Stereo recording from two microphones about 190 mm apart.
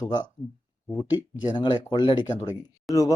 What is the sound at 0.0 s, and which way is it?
Speech, 20° left (ahead or behind).